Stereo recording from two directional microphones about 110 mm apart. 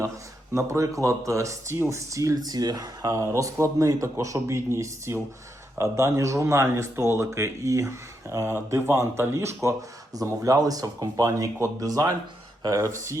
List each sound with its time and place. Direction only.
0.5 s speech: 30° right (ahead or behind)